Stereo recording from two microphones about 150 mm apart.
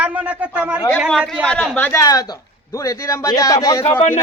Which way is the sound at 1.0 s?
Centre (ahead or behind).